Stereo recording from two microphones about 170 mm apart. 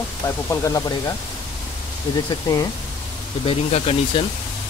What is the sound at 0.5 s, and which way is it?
Speech, 20° left (ahead or behind).